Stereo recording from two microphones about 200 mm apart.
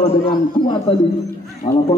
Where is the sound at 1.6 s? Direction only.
40° left (ahead or behind).